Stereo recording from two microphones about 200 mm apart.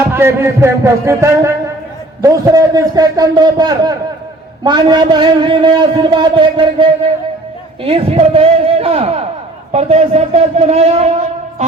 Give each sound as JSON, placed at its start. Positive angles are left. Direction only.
{"t": 0.1, "sound": "a man's voice", "side_deg": -10}